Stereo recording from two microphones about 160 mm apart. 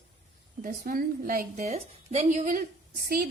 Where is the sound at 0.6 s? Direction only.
60° right (ahead or behind).